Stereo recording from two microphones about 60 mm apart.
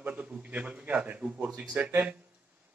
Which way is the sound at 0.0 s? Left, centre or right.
Right.